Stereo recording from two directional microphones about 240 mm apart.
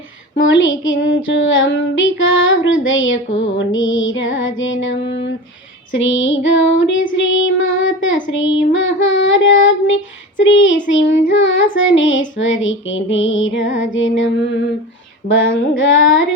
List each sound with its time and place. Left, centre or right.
0.3 s child singing: left
15.3 s female singing: left